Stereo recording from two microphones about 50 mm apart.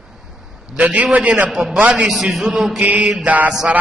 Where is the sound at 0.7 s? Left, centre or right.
Right.